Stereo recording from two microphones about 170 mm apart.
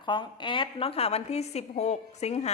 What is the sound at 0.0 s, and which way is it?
A woman's voice, 30° left (ahead or behind).